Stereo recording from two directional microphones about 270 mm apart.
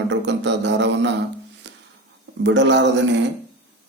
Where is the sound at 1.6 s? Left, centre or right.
Right.